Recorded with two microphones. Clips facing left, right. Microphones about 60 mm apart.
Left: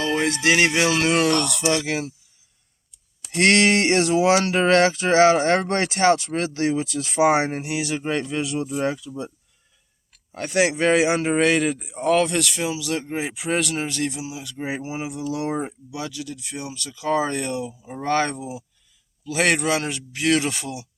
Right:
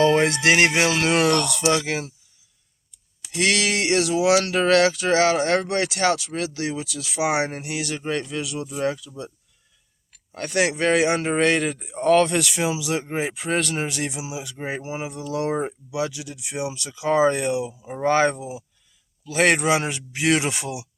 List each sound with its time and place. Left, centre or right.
0.0 s speech: right
0.5 s speech: right
0.9 s speech: centre
3.3 s speech: left
7.5 s speech: centre
10.3 s a man's voice: centre
13.8 s speech: centre
14.6 s speech: centre